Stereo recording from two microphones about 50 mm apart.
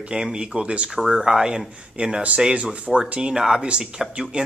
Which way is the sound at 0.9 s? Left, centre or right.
Centre.